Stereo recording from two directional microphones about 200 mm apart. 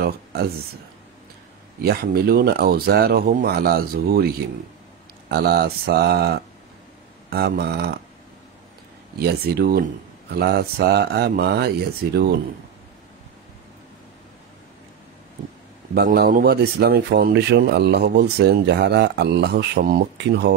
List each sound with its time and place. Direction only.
0.0 s a sound: 50° right (ahead or behind)
1.8 s speech: 50° right (ahead or behind)
5.3 s a man's voice: 50° right (ahead or behind)
9.2 s speech: 50° right (ahead or behind)
15.9 s a man's voice: 50° right (ahead or behind)